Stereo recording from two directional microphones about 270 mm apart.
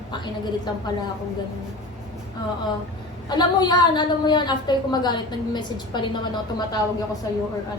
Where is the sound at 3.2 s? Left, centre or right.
Centre.